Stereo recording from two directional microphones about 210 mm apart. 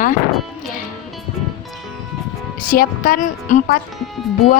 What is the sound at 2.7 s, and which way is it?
A woman's voice, 40° left (ahead or behind).